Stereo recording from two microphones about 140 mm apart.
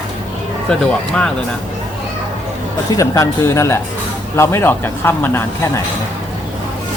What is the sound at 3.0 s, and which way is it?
Speech, 20° left (ahead or behind).